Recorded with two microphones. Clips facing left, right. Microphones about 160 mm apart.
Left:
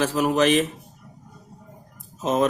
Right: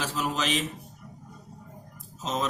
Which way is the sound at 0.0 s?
55° left (ahead or behind).